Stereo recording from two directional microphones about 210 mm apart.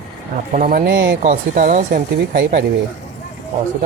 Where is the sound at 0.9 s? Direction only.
55° right (ahead or behind).